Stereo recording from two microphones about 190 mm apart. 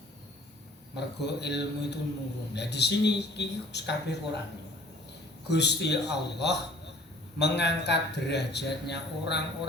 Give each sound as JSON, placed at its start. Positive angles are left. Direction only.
{"t": 0.9, "sound": "a man's voice", "side_deg": 60}
{"t": 5.5, "sound": "a man's voice", "side_deg": 65}